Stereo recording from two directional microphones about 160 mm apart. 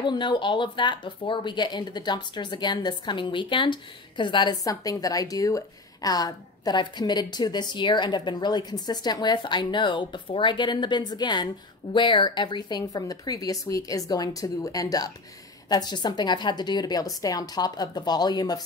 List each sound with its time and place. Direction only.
0.0 s speech: 30° left (ahead or behind)